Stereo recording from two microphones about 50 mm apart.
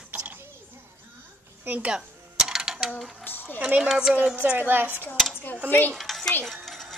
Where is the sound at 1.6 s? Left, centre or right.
Right.